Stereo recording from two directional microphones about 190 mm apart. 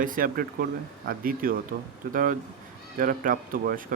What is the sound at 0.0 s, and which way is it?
Speech, 45° right (ahead or behind).